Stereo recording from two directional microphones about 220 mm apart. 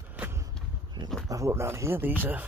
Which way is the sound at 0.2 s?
10° right (ahead or behind).